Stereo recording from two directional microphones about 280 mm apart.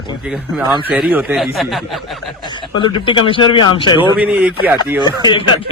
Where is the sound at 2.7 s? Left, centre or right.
Centre.